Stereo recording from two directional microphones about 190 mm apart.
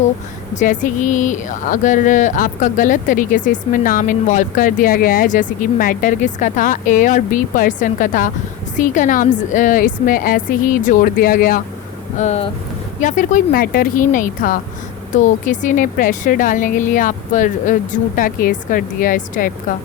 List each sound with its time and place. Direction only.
0.5 s speech: 40° left (ahead or behind)
12.2 s speech: 35° left (ahead or behind)